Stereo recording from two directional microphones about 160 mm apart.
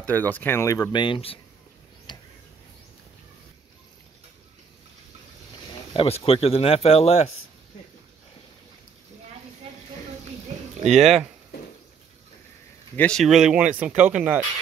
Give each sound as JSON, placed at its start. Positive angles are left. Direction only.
{"t": 0.0, "sound": "speech", "side_deg": 10}
{"t": 2.1, "sound": "a sound", "side_deg": 30}
{"t": 5.9, "sound": "speech", "side_deg": 40}
{"t": 11.0, "sound": "speech", "side_deg": 0}
{"t": 12.9, "sound": "speech", "side_deg": 5}